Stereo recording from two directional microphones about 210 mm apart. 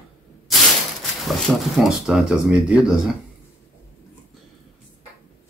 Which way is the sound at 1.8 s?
Centre (ahead or behind).